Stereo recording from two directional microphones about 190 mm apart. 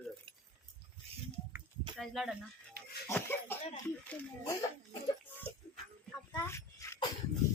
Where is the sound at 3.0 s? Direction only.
10° left (ahead or behind).